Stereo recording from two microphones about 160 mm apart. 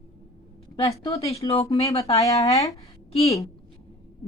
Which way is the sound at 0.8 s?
35° left (ahead or behind).